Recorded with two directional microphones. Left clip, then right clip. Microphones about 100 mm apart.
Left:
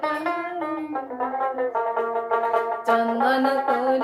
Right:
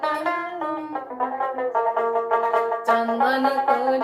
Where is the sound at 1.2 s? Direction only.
30° right (ahead or behind).